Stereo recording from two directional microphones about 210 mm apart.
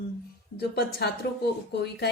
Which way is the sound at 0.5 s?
50° left (ahead or behind).